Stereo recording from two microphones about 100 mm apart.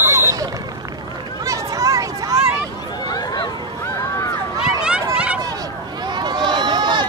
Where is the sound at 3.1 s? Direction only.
45° left (ahead or behind).